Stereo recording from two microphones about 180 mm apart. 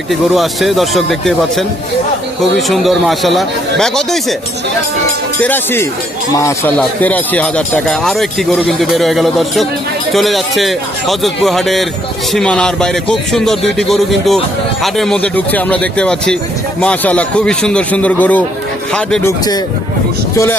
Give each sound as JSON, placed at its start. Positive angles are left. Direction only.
{"t": 0.1, "sound": "speech", "side_deg": 0}
{"t": 2.4, "sound": "speech", "side_deg": 0}
{"t": 5.4, "sound": "a man's voice", "side_deg": 10}
{"t": 20.3, "sound": "a man's voice", "side_deg": 15}